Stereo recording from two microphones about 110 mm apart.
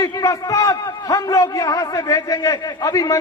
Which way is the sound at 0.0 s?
30° left (ahead or behind).